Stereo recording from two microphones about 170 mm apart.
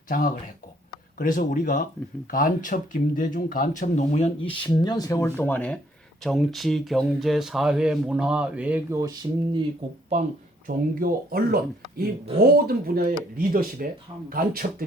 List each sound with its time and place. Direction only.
0.1 s speech: 55° left (ahead or behind); by 9.6 s 25° right (ahead or behind)
11.0 s speech: 60° right (ahead or behind)